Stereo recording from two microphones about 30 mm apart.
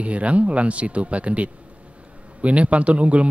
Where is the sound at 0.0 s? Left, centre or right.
Right.